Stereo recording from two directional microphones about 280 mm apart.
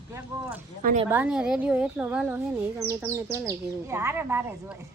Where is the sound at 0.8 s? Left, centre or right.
Right.